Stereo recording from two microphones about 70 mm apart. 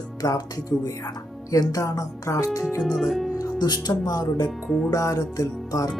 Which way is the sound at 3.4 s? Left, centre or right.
Left.